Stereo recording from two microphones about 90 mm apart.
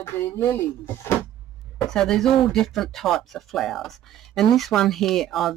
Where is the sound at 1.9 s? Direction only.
5° left (ahead or behind).